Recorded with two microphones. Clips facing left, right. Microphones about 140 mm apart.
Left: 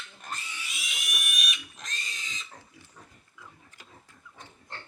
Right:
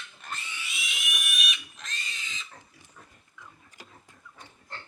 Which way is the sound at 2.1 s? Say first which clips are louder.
Even; 40° left (ahead or behind).